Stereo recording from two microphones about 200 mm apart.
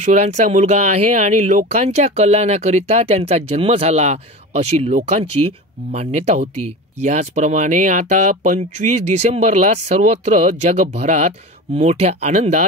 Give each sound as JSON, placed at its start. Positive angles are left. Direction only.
{"t": 0.0, "sound": "speech", "side_deg": -35}